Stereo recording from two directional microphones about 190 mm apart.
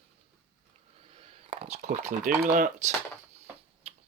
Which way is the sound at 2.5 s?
45° right (ahead or behind).